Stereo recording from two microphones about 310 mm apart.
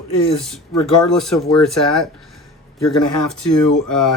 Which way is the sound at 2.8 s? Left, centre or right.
Left.